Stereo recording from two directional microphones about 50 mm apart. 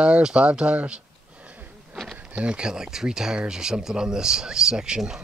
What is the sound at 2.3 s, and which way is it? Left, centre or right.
Speech, right.